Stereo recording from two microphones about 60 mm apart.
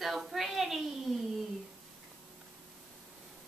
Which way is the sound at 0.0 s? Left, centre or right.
Centre.